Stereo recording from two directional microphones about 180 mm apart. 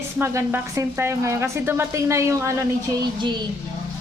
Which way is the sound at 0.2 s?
15° right (ahead or behind).